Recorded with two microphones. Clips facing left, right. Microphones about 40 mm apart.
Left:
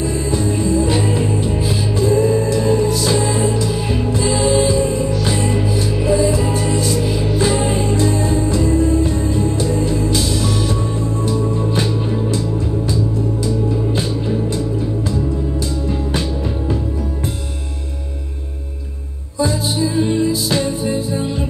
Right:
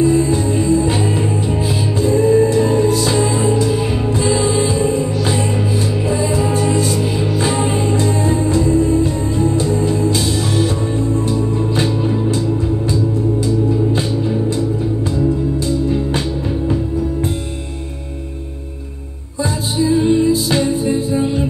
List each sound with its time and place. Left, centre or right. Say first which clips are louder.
0.0 s music: right 5 dB; right
19.3 s music: left 1 dB; right